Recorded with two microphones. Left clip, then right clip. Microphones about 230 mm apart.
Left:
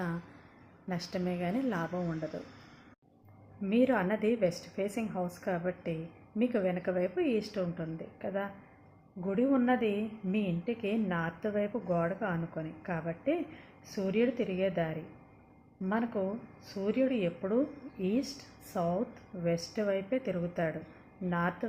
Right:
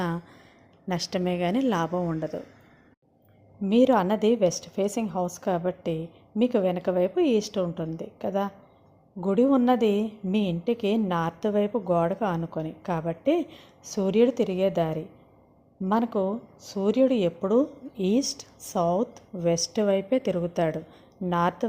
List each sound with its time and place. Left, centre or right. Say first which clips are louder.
0.9 s a woman's voice: right 8 dB; right
3.7 s a woman's voice: right 8 dB; right